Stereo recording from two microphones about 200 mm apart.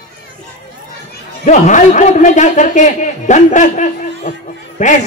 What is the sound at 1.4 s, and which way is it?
A man's voice, 40° left (ahead or behind).